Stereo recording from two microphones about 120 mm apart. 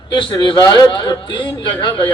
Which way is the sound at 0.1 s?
40° left (ahead or behind).